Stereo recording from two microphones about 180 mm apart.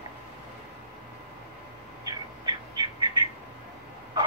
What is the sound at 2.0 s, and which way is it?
Bird, 25° right (ahead or behind).